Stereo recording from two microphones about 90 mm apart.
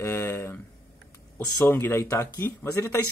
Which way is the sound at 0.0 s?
30° left (ahead or behind).